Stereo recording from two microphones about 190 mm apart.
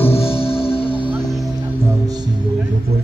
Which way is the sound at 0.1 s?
30° left (ahead or behind).